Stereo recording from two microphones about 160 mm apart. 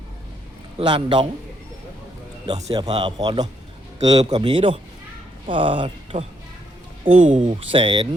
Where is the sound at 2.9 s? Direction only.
30° right (ahead or behind).